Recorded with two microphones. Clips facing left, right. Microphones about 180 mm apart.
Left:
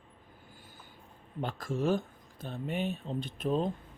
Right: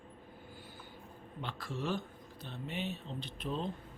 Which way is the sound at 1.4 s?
45° left (ahead or behind).